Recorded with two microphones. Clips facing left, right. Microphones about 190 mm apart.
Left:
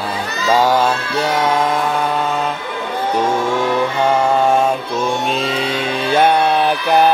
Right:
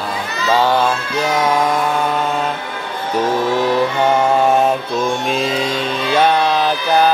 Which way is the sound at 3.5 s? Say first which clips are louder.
Right 1 dB; 5° right (ahead or behind).